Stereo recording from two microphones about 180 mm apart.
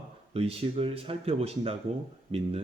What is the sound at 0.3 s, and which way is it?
Speech, 30° right (ahead or behind).